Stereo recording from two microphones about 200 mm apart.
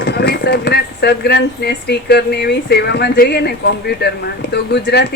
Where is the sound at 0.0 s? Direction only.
50° left (ahead or behind).